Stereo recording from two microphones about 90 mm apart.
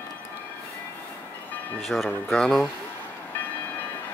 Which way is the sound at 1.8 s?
Centre (ahead or behind).